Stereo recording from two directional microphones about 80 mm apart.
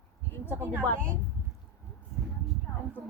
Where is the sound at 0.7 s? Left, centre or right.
Centre.